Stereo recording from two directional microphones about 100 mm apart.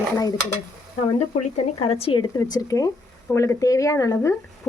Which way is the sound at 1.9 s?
65° left (ahead or behind).